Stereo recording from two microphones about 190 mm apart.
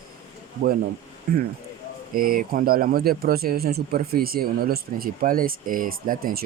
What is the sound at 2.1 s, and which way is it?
Speech, 50° right (ahead or behind).